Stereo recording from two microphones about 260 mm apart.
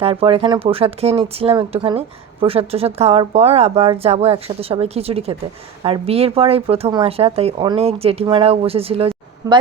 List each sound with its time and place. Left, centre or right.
0.0 s speech: right